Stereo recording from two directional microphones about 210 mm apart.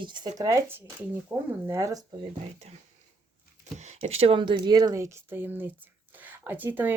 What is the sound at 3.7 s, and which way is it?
Speech, 30° right (ahead or behind).